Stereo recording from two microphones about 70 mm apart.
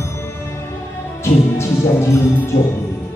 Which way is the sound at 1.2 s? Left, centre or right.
Left.